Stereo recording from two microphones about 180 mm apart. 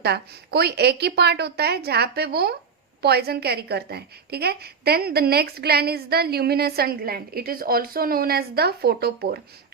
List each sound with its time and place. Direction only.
0.0 s a woman's voice: 65° right (ahead or behind)